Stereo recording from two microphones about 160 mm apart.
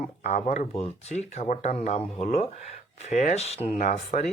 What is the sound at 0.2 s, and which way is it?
Speech, 45° left (ahead or behind).